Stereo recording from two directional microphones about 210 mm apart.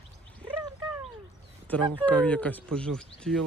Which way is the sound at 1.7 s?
5° left (ahead or behind).